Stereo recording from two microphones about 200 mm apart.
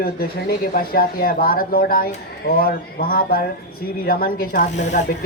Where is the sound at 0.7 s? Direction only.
50° left (ahead or behind).